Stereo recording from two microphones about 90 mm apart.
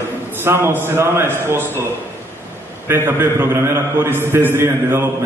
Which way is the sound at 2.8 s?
25° right (ahead or behind).